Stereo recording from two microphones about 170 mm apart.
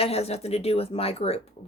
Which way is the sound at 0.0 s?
35° left (ahead or behind).